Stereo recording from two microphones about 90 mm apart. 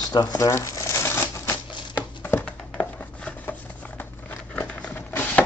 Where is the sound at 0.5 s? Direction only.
35° left (ahead or behind).